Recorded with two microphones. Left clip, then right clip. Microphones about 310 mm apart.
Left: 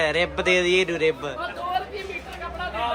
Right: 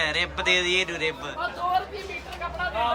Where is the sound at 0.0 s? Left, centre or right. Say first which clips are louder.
Left 3 dB; centre.